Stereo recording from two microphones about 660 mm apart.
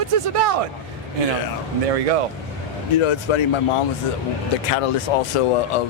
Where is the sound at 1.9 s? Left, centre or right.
Right.